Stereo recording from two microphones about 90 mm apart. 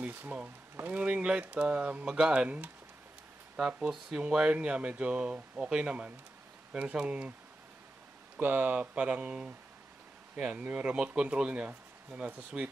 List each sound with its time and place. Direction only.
0.0 s speech: 20° right (ahead or behind)
8.4 s speech: 15° right (ahead or behind)